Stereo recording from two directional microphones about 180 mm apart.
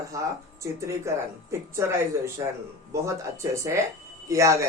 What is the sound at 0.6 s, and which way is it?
Speech, 15° right (ahead or behind).